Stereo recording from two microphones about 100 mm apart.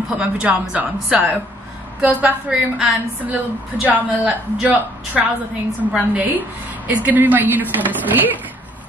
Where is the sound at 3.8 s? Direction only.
15° right (ahead or behind).